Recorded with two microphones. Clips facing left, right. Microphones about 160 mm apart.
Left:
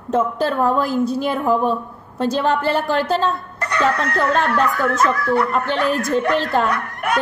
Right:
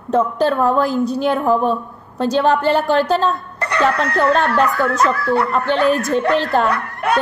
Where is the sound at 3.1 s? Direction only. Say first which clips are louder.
Right 2 dB; 35° right (ahead or behind).